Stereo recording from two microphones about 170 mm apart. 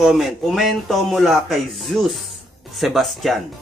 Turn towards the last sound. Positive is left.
turn(degrees=0)  # may be behind; listen again after turning